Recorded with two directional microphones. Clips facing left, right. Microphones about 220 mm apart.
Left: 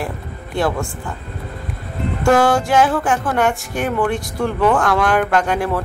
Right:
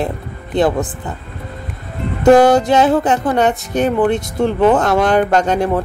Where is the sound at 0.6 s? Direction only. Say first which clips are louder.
Right 5 dB; 20° right (ahead or behind).